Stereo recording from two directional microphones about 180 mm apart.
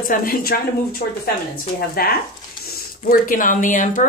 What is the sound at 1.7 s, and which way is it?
Speech, 60° left (ahead or behind).